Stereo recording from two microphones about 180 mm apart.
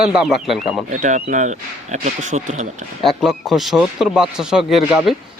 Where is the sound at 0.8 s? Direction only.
40° right (ahead or behind).